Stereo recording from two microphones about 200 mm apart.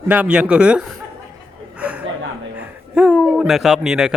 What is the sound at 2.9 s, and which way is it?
Speech, 5° right (ahead or behind).